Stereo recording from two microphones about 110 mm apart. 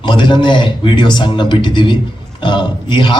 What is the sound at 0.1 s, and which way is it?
A man's voice, 45° left (ahead or behind).